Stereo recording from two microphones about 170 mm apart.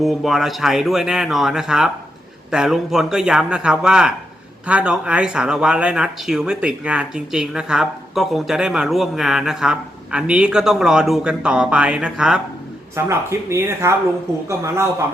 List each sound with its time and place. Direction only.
0.0 s speech: centre (ahead or behind); by 15.0 s 15° right (ahead or behind)